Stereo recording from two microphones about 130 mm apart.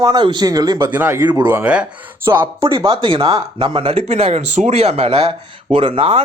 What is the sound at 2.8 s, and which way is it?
Speech, 40° right (ahead or behind).